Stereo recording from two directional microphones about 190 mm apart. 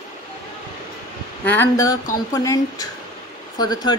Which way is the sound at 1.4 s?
10° left (ahead or behind).